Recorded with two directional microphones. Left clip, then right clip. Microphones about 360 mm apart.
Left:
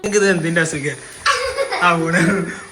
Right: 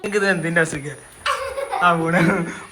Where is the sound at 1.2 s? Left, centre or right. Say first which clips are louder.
Left 5 dB; right.